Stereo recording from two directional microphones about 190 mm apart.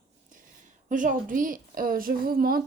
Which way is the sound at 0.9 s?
45° right (ahead or behind).